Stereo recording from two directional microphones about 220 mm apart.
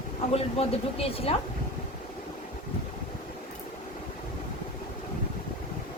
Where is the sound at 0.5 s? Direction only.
25° left (ahead or behind).